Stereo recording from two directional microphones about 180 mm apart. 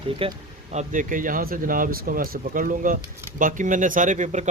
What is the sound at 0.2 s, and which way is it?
Speech, 30° right (ahead or behind).